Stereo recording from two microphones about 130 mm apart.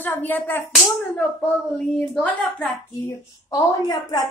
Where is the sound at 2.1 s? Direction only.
10° left (ahead or behind).